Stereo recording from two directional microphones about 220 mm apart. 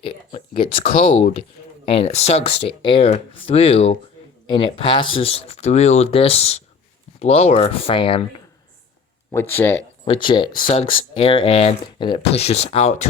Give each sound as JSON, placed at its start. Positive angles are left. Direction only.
{"t": 0.3, "sound": "speech", "side_deg": 20}
{"t": 0.9, "sound": "speech", "side_deg": 40}
{"t": 1.8, "sound": "speech", "side_deg": 25}
{"t": 9.3, "sound": "speech", "side_deg": 10}
{"t": 10.1, "sound": "speech", "side_deg": 20}